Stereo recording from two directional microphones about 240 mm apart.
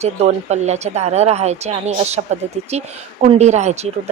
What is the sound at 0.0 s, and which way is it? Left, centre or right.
A woman's voice, right.